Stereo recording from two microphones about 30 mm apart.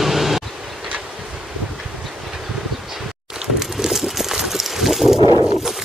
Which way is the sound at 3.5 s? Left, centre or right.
Centre.